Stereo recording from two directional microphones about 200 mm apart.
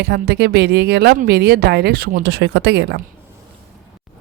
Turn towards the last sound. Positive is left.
turn(degrees=-60)  # may be behind; listen again after turning